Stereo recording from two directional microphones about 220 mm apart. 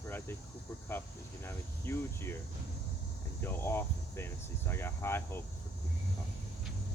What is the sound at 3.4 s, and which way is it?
Speech, 10° left (ahead or behind).